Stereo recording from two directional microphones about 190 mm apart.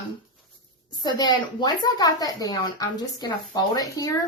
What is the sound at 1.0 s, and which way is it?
Speech, 20° left (ahead or behind).